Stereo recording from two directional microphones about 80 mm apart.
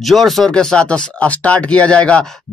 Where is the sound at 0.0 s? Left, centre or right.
Centre.